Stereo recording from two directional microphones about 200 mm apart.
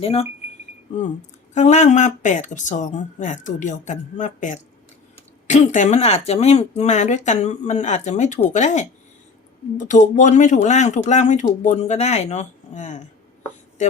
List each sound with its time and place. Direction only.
0.0 s speech: 30° left (ahead or behind)
1.5 s speech: 35° left (ahead or behind)